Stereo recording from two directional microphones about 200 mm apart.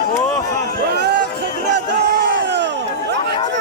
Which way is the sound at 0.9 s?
55° right (ahead or behind).